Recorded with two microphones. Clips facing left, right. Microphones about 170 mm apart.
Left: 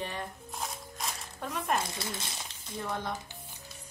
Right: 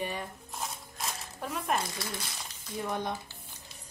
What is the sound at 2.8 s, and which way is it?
Speech, 15° right (ahead or behind).